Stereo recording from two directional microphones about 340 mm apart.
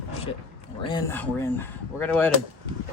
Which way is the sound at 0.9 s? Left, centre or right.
Centre.